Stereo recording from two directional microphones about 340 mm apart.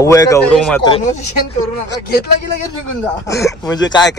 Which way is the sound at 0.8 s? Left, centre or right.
Centre.